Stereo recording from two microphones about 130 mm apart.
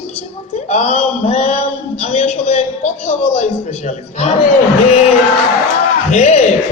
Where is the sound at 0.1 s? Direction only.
65° left (ahead or behind).